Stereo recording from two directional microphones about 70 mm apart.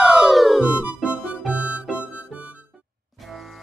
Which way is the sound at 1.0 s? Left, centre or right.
Centre.